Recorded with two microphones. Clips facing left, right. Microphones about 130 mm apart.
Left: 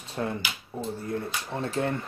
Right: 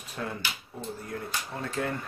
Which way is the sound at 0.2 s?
30° left (ahead or behind).